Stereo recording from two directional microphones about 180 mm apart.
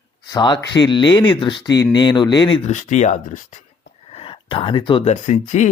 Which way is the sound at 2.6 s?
40° left (ahead or behind).